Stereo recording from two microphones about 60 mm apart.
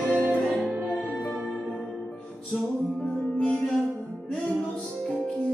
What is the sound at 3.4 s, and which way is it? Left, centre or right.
Music, centre.